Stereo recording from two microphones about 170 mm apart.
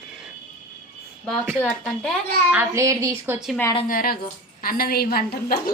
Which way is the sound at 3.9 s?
60° left (ahead or behind).